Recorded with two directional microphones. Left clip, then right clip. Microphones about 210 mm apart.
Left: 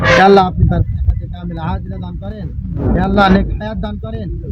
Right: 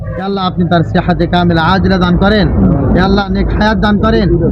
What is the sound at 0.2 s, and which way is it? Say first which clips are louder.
Speech: left 2 dB; 20° left (ahead or behind).